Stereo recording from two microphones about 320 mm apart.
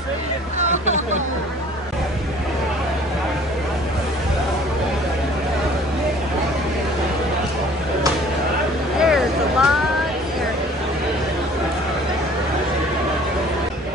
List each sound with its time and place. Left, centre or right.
0.6 s hubbub: right
9.0 s vehicle: centre